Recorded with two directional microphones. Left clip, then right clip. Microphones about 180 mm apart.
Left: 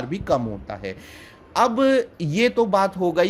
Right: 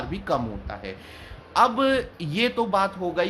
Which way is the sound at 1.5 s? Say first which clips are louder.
Left 2 dB; 35° left (ahead or behind).